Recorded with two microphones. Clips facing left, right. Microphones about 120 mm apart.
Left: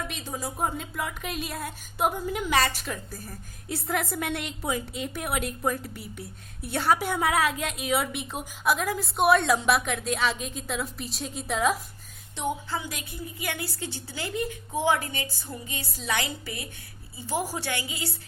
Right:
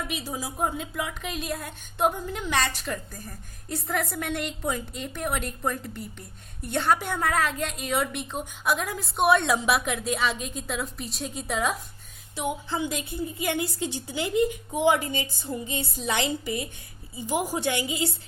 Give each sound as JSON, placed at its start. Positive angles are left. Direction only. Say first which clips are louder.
{"t": 0.1, "sound": "a woman's voice", "louder": "right 1 dB", "side_deg": -5}
{"t": 12.7, "sound": "a woman's voice", "louder": "right 5 dB", "side_deg": -25}